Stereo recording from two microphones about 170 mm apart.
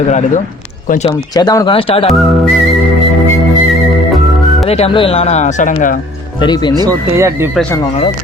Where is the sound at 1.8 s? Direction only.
35° left (ahead or behind).